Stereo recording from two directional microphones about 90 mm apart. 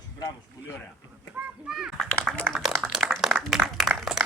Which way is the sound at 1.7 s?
5° right (ahead or behind).